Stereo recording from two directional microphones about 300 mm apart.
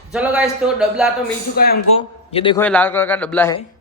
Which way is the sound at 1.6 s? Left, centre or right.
Left.